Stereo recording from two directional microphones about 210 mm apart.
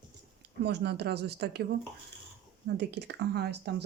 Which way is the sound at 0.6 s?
50° right (ahead or behind).